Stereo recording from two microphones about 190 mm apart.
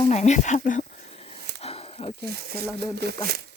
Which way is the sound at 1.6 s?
30° left (ahead or behind).